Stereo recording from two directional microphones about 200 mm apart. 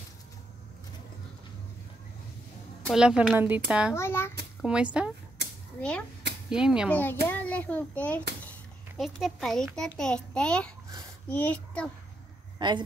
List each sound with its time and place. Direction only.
2.9 s a child's voice: 5° right (ahead or behind)
3.9 s a child's voice: 10° left (ahead or behind)
4.6 s a child's voice: 5° right (ahead or behind)
6.9 s a child's voice: 10° left (ahead or behind)
12.5 s speech: 20° right (ahead or behind)